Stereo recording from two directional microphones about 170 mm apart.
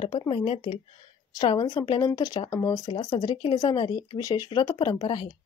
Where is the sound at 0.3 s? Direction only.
30° left (ahead or behind).